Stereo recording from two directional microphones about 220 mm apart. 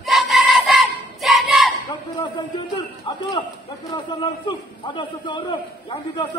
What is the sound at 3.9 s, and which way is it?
A man's voice, 20° left (ahead or behind).